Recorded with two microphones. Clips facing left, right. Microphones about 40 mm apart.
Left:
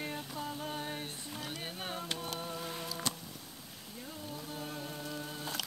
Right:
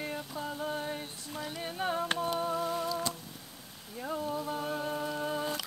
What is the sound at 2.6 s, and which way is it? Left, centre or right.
Humming, centre.